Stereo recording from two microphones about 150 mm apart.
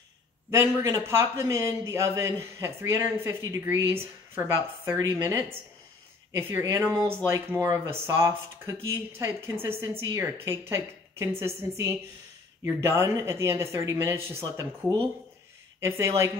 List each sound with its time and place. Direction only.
0.6 s a man's voice: 20° right (ahead or behind)
15.8 s a man's voice: 20° right (ahead or behind)